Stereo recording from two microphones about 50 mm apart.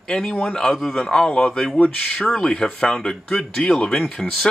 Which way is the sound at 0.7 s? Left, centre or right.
Centre.